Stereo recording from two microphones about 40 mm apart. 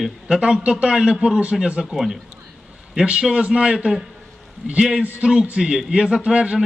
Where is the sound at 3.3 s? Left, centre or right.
Right.